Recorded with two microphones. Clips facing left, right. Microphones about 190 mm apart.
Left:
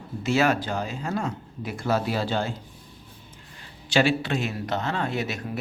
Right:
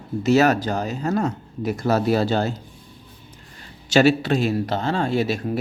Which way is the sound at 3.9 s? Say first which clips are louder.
Right 6 dB; 40° right (ahead or behind).